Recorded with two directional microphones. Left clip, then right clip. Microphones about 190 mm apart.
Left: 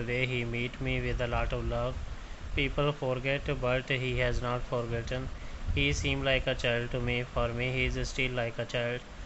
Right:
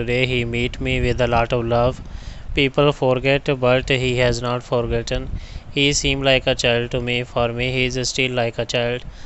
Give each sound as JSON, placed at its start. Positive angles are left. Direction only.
{"t": 0.0, "sound": "speech", "side_deg": -50}